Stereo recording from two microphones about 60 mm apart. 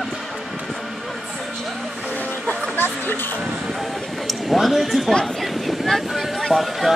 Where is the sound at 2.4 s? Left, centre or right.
Left.